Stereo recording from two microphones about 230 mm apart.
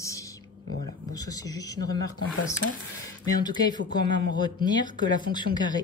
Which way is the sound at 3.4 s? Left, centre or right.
Centre.